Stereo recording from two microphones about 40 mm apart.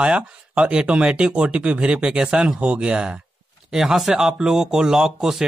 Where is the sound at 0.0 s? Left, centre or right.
Right.